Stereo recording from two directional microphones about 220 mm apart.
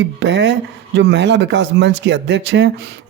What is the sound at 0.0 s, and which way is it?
Speech, 55° right (ahead or behind).